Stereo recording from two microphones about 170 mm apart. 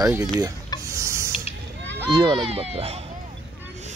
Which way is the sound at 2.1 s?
25° right (ahead or behind).